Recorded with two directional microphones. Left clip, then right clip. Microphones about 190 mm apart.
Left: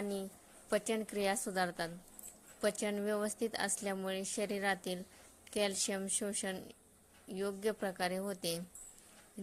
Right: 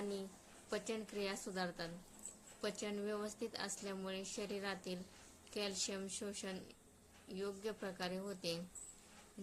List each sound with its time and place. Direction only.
0.7 s a woman's voice: 35° left (ahead or behind)